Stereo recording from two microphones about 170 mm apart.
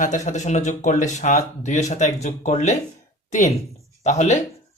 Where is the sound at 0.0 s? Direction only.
45° left (ahead or behind).